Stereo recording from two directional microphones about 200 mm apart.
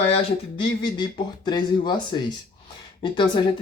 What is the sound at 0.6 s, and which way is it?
Speech, 25° left (ahead or behind).